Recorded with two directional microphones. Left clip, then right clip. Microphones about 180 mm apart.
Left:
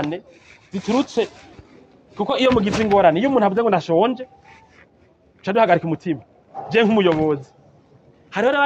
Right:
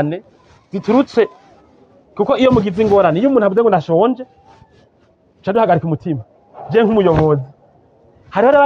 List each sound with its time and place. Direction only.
0.7 s speech: 50° right (ahead or behind)
5.4 s a man's voice: 45° right (ahead or behind)